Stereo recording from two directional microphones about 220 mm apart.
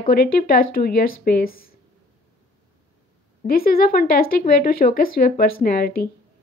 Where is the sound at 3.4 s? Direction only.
45° left (ahead or behind).